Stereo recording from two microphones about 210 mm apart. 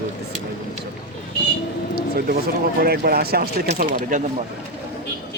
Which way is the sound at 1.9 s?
45° right (ahead or behind).